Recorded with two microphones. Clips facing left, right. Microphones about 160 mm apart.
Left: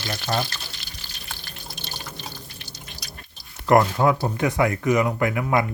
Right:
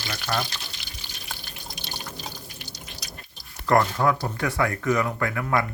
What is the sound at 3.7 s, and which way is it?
Speech, 20° left (ahead or behind).